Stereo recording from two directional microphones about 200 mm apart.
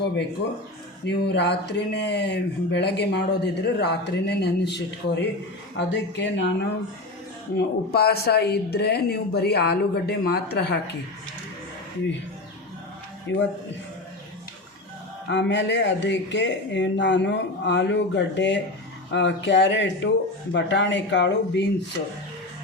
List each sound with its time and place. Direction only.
1.0 s speech: 60° left (ahead or behind)
7.5 s speech: 50° left (ahead or behind)
13.3 s speech: 65° left (ahead or behind)
15.3 s speech: 65° left (ahead or behind)